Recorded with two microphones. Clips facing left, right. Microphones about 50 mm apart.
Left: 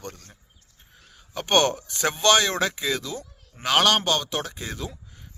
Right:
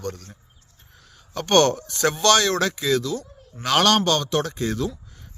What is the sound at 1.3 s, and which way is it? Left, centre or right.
Speech, centre.